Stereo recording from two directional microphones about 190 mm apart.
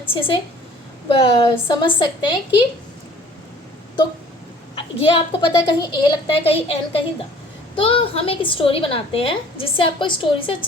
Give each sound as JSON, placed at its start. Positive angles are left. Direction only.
{"t": 0.1, "sound": "a woman's voice", "side_deg": 25}
{"t": 4.7, "sound": "a woman's voice", "side_deg": 25}